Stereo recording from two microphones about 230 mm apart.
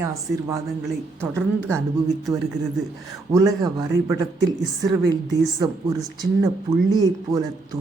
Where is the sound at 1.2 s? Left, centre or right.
Centre.